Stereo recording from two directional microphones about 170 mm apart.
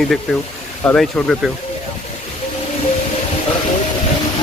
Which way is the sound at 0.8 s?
5° left (ahead or behind).